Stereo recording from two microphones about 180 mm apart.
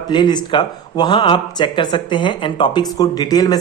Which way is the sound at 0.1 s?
25° left (ahead or behind).